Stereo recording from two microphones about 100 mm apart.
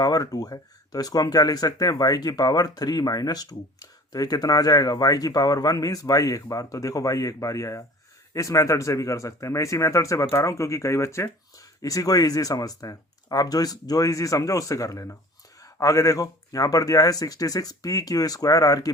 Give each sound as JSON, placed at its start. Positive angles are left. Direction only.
{"t": 0.0, "sound": "speech", "side_deg": 40}